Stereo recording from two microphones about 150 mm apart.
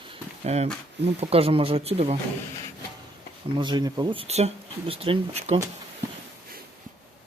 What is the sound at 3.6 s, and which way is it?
Speech, 30° right (ahead or behind).